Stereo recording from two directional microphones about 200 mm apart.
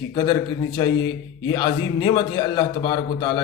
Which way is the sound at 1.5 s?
20° left (ahead or behind).